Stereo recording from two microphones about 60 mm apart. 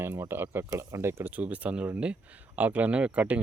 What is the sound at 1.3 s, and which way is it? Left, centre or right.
Speech, right.